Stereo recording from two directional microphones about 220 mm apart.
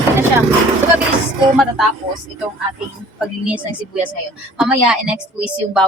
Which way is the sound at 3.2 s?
5° right (ahead or behind).